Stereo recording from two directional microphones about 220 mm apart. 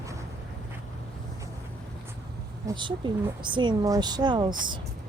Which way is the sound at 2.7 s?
20° right (ahead or behind).